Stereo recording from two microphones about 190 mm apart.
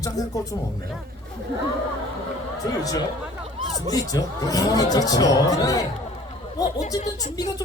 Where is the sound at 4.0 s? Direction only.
20° left (ahead or behind).